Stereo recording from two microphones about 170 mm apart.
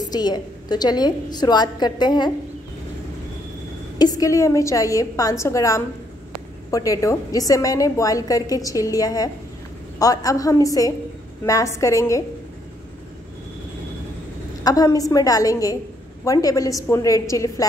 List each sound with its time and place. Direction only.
0.0 s a woman's voice: 25° left (ahead or behind)
4.0 s a woman's voice: 20° left (ahead or behind)
14.6 s a woman's voice: 20° left (ahead or behind)